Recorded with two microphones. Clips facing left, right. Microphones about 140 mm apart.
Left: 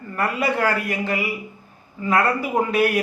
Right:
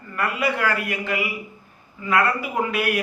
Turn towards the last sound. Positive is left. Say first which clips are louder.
# left 4 dB
turn(degrees=35)  # may be behind; listen again after turning